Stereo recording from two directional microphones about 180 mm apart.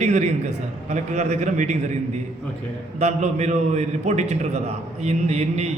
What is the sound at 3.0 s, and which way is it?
A man's voice, 40° right (ahead or behind).